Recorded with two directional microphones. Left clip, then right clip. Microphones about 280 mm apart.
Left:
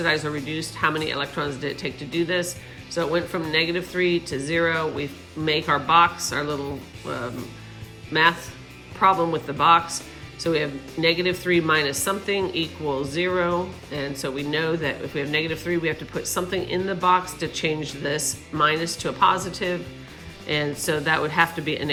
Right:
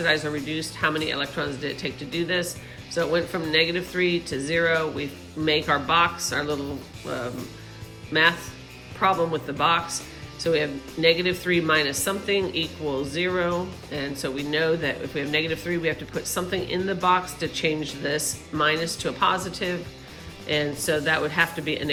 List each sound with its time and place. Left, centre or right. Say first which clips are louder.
0.0 s speech: even; centre